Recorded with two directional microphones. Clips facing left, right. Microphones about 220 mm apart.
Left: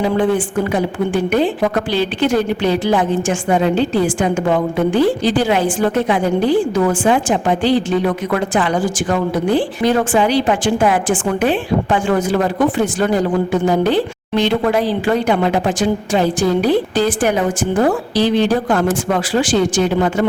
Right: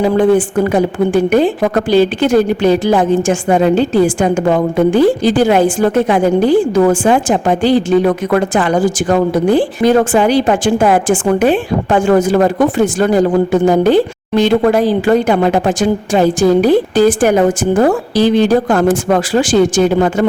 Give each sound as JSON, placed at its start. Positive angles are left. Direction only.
{"t": 0.0, "sound": "a woman's voice", "side_deg": -45}